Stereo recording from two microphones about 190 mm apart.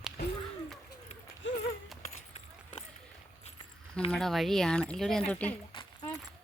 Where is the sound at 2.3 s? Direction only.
35° left (ahead or behind).